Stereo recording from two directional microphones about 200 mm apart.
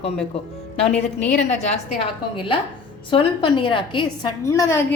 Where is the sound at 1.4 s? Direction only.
35° left (ahead or behind).